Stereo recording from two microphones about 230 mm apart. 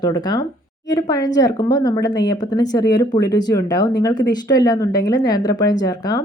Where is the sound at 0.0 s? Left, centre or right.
Centre.